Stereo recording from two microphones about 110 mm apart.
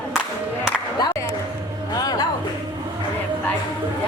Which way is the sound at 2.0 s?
35° left (ahead or behind).